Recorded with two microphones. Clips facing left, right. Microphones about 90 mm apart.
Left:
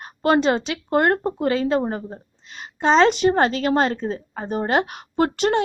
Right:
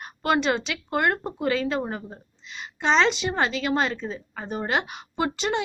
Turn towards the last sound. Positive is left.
turn(degrees=55)  # may be behind; listen again after turning